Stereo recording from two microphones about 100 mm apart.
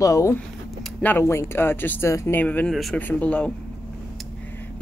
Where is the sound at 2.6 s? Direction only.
Centre (ahead or behind).